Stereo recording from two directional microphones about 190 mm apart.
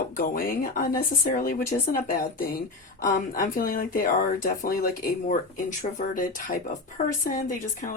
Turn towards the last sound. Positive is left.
turn(degrees=45)  # may be behind; listen again after turning